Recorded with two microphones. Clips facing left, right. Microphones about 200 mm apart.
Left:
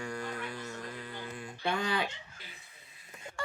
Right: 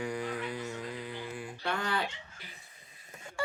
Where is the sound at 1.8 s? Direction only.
15° left (ahead or behind).